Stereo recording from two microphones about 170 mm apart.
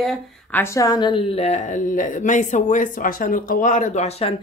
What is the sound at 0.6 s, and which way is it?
A woman's voice, 20° left (ahead or behind).